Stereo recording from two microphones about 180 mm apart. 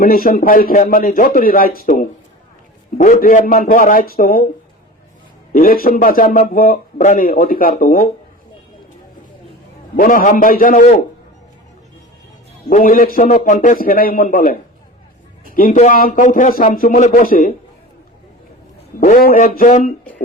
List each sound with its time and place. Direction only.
0.0 s a man's voice: 55° left (ahead or behind)
5.5 s a man's voice: 55° left (ahead or behind)
9.9 s a man's voice: 50° left (ahead or behind)
12.6 s a man's voice: 50° left (ahead or behind)
18.9 s a man's voice: 55° left (ahead or behind)